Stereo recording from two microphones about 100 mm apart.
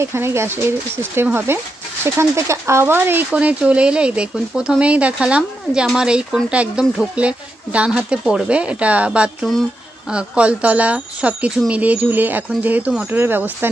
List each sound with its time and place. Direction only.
0.0 s speech: 25° right (ahead or behind)
3.3 s speech: 10° right (ahead or behind)